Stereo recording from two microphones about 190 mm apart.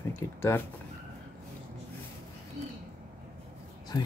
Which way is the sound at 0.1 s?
10° left (ahead or behind).